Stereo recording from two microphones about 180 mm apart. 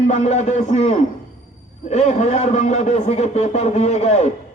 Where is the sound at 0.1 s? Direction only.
40° left (ahead or behind).